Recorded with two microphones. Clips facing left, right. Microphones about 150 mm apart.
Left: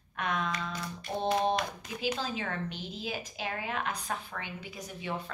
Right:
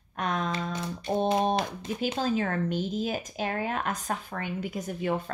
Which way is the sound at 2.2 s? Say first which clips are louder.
Right 8 dB; 45° right (ahead or behind).